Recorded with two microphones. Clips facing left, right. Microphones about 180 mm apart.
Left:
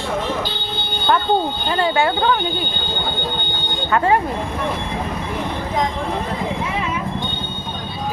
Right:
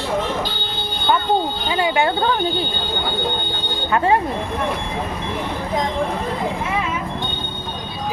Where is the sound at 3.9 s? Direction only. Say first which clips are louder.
Left 1 dB; 20° right (ahead or behind).